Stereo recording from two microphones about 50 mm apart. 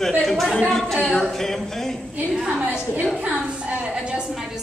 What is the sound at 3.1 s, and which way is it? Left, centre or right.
A woman's voice, right.